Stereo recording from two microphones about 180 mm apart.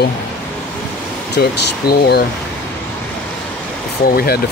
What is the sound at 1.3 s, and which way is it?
Speech, 60° left (ahead or behind).